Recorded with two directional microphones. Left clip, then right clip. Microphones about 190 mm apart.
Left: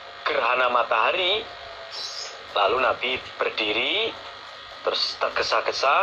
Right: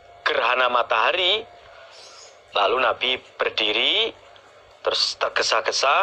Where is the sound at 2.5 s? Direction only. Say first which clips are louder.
Right 1 dB; 35° right (ahead or behind).